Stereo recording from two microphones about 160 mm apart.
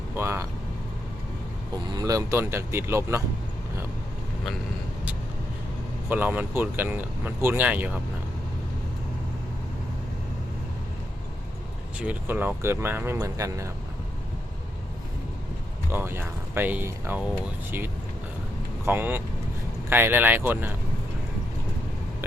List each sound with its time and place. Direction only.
0.2 s vehicle: 15° right (ahead or behind)
1.7 s speech: 25° right (ahead or behind)
6.1 s speech: 10° right (ahead or behind)
11.9 s speech: 10° right (ahead or behind)
15.9 s speech: 15° right (ahead or behind)